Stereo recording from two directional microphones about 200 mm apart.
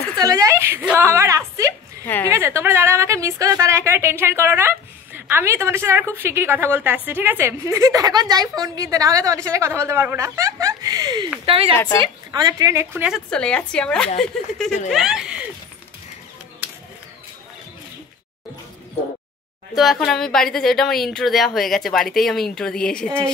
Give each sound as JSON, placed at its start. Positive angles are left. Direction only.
{"t": 0.2, "sound": "a woman's voice", "side_deg": -15}
{"t": 2.0, "sound": "a woman's voice", "side_deg": 10}
{"t": 2.3, "sound": "a woman's voice", "side_deg": -10}
{"t": 11.7, "sound": "a woman's voice", "side_deg": 10}
{"t": 12.0, "sound": "a woman's voice", "side_deg": -20}
{"t": 13.3, "sound": "speech", "side_deg": 5}
{"t": 19.7, "sound": "speech", "side_deg": 0}